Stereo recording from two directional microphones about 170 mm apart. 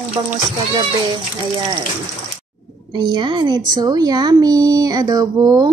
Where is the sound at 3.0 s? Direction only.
25° right (ahead or behind).